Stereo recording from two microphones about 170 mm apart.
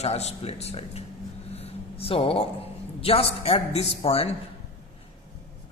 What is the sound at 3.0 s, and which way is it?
Speech, 35° left (ahead or behind).